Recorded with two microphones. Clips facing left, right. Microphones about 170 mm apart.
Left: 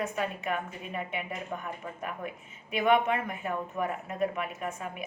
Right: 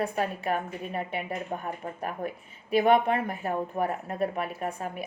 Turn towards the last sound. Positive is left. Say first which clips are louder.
# right 3 dB
turn(degrees=-35)  # may be behind; listen again after turning